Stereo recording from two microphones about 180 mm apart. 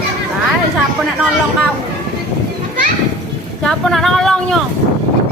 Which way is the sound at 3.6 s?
Centre (ahead or behind).